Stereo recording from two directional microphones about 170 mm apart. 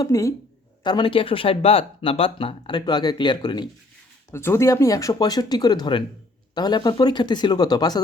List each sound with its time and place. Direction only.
0.0 s speech: 20° left (ahead or behind)
4.3 s speech: 15° left (ahead or behind)